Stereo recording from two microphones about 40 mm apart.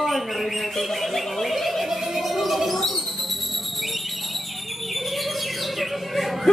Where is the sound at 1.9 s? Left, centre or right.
Centre.